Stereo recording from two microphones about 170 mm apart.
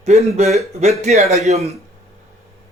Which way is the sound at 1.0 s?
40° right (ahead or behind).